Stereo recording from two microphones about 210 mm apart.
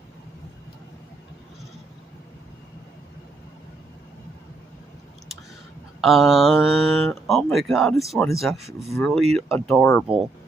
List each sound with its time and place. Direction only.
5.9 s speech: centre (ahead or behind)
10.1 s speech: 25° right (ahead or behind)